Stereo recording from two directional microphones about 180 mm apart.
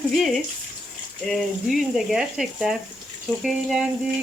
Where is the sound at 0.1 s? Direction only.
Centre (ahead or behind).